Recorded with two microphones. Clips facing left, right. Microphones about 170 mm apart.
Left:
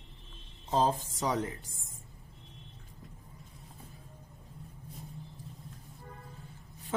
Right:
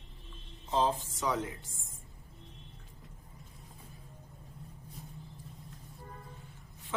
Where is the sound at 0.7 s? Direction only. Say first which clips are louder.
Left 2 dB; 40° left (ahead or behind).